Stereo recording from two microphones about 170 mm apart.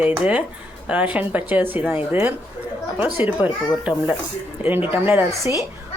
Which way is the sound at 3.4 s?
10° right (ahead or behind).